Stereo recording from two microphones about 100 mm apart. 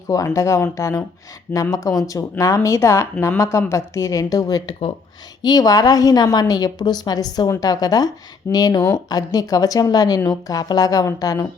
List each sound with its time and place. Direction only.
0.1 s speech: 35° left (ahead or behind)